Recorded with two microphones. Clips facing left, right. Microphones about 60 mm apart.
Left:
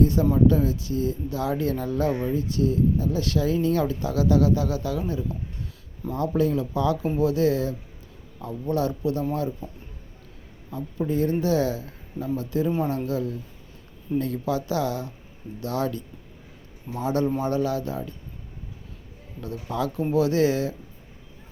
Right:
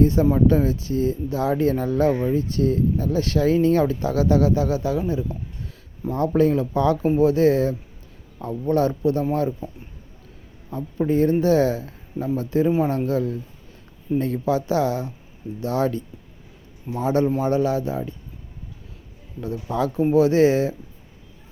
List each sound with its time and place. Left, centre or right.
0.0 s speech: right
6.1 s speech: right
10.7 s speech: right
19.4 s speech: right